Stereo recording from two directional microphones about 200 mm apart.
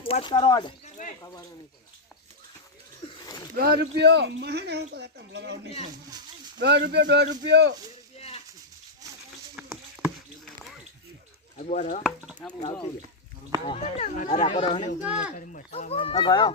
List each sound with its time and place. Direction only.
0.0 s speech: 25° left (ahead or behind)
3.1 s a sound: 20° left (ahead or behind)
3.5 s speech: 50° right (ahead or behind)
6.6 s speech: 55° right (ahead or behind)
9.6 s a sound: centre (ahead or behind)
11.5 s speech: 35° left (ahead or behind)
12.0 s speech: 5° right (ahead or behind)
13.7 s speech: 30° left (ahead or behind)